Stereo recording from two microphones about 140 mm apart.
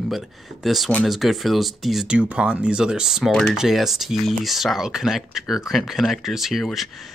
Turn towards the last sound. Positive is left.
turn(degrees=0)  # may be behind; listen again after turning